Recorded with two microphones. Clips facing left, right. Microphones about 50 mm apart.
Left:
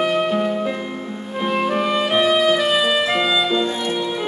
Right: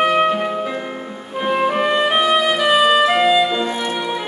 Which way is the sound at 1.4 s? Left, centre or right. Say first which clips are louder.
Right 3 dB; centre.